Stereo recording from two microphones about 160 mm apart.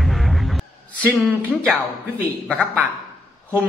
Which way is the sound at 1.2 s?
Centre (ahead or behind).